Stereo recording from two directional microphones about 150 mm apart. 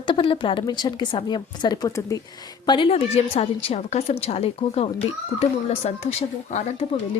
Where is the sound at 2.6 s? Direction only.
35° left (ahead or behind); by 6.6 s 50° left (ahead or behind).